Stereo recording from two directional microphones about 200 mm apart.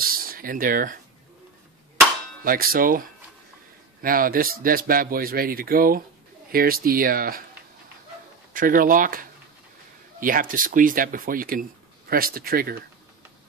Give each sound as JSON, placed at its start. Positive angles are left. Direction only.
{"t": 0.0, "sound": "a sound", "side_deg": -45}
{"t": 2.4, "sound": "speech", "side_deg": -45}
{"t": 4.0, "sound": "speech", "side_deg": -45}
{"t": 8.5, "sound": "speech", "side_deg": -45}
{"t": 10.2, "sound": "speech", "side_deg": -45}